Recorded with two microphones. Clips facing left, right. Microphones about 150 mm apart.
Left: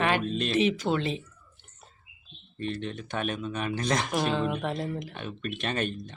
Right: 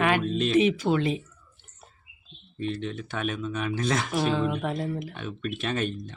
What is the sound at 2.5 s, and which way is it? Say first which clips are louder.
Speech: right 2 dB; centre (ahead or behind).